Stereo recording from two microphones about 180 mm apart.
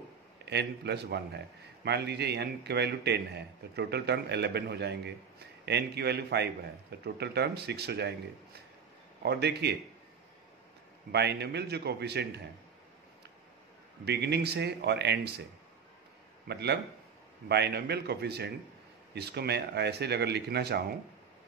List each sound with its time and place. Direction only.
0.5 s a man's voice: 70° right (ahead or behind)
9.2 s a man's voice: 65° right (ahead or behind)
11.1 s a man's voice: 70° right (ahead or behind)
14.0 s a man's voice: 65° right (ahead or behind)
16.4 s a man's voice: 65° right (ahead or behind)